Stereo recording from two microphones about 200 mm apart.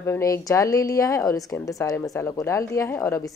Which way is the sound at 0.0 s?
15° left (ahead or behind).